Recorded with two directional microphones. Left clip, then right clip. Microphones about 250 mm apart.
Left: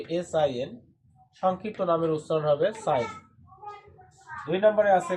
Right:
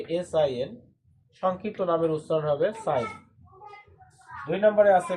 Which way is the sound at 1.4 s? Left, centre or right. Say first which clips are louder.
Left 1 dB; centre.